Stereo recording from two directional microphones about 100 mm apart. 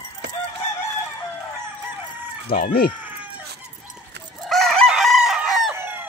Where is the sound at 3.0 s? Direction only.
15° right (ahead or behind).